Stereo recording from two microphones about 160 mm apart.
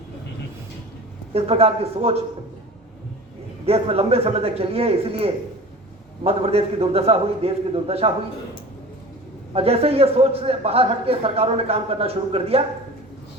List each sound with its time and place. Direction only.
1.3 s a man's voice: 40° right (ahead or behind)
3.7 s a man's voice: 40° right (ahead or behind)
9.5 s a man's voice: 40° right (ahead or behind)